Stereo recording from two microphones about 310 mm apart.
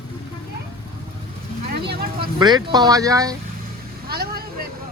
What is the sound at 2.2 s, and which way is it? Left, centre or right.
Speech, centre.